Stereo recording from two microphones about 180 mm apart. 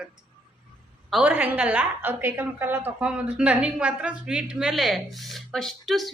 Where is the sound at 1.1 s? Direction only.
10° right (ahead or behind).